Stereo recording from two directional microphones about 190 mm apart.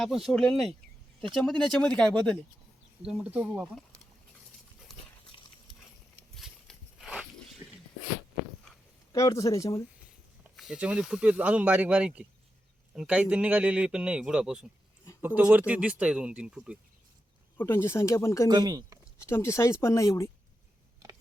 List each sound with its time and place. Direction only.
0.0 s a man's voice: centre (ahead or behind)
6.3 s a sound: centre (ahead or behind)
9.1 s speech: 15° left (ahead or behind)
10.6 s a man's voice: 5° right (ahead or behind)
17.6 s speech: 10° left (ahead or behind)
18.4 s speech: 20° right (ahead or behind)
19.3 s speech: 15° left (ahead or behind)